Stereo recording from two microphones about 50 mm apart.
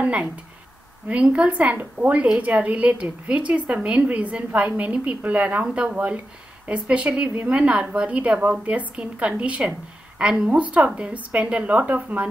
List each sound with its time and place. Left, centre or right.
0.0 s a woman's voice: right
1.5 s a woman's voice: right